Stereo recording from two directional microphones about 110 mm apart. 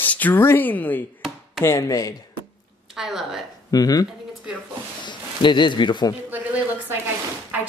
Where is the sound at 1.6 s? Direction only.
30° left (ahead or behind).